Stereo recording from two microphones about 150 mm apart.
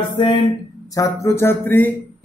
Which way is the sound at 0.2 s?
30° left (ahead or behind).